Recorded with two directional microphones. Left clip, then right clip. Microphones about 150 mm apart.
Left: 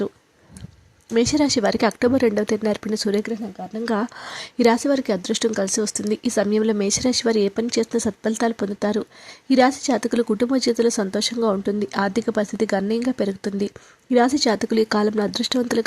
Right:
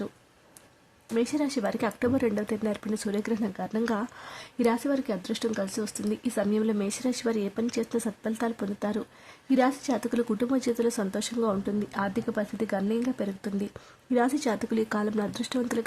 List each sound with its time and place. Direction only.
1.1 s speech: 40° left (ahead or behind)